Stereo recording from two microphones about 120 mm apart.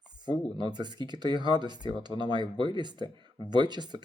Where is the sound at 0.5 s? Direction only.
35° right (ahead or behind).